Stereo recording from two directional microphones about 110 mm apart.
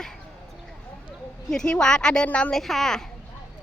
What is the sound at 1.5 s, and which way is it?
A woman's voice, 5° left (ahead or behind).